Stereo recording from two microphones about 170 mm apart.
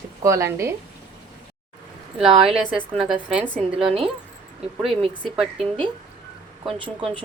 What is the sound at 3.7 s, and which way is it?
Speech, 35° right (ahead or behind).